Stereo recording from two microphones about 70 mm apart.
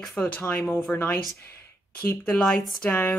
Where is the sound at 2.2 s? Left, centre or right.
Centre.